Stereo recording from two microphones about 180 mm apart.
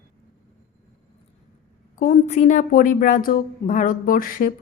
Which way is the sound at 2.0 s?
40° left (ahead or behind).